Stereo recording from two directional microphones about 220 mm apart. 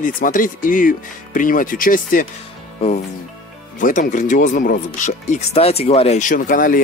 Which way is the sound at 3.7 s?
35° left (ahead or behind).